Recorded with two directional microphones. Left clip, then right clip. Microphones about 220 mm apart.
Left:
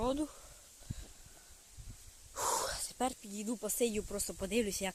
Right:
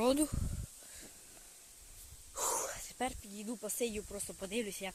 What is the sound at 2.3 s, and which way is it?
Whispering, 5° left (ahead or behind).